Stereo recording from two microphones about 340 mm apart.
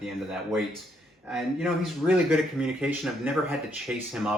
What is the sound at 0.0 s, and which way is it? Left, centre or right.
Speech, centre.